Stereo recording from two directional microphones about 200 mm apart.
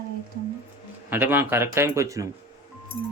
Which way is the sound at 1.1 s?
10° right (ahead or behind).